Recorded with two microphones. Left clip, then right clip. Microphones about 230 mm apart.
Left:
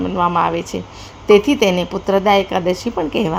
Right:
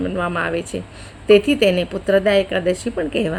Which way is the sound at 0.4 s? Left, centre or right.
Centre.